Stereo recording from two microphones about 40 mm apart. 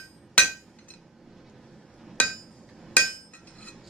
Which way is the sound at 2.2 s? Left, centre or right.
Left.